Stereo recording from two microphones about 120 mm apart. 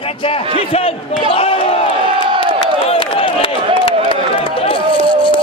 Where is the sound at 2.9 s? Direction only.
50° left (ahead or behind).